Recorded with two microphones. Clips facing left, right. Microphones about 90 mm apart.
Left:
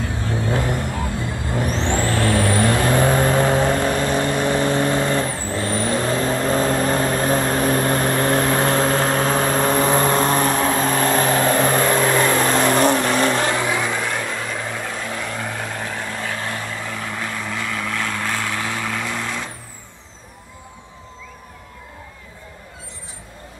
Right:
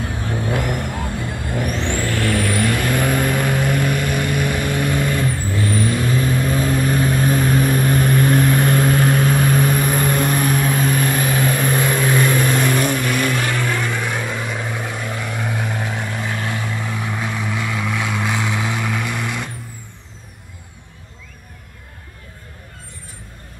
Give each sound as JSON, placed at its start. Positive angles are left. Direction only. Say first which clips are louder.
{"t": 0.2, "sound": "vehicle", "louder": "even", "side_deg": 20}
{"t": 7.4, "sound": "vehicle", "louder": "right 1 dB", "side_deg": 50}
{"t": 7.8, "sound": "vehicle", "louder": "right 2 dB", "side_deg": 30}
{"t": 12.0, "sound": "vehicle", "louder": "even", "side_deg": 50}
{"t": 12.8, "sound": "vehicle", "louder": "left 3 dB", "side_deg": 30}
{"t": 14.0, "sound": "vehicle", "louder": "right 1 dB", "side_deg": -10}